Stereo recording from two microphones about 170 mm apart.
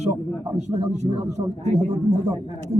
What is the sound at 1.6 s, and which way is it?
Speech, 45° right (ahead or behind).